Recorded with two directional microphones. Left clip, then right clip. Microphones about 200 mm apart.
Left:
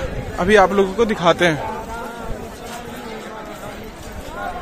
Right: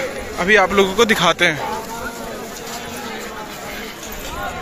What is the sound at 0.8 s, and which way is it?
Speech, 5° left (ahead or behind).